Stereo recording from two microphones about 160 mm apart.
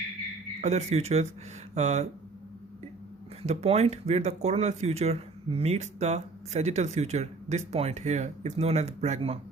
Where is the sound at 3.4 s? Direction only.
45° right (ahead or behind).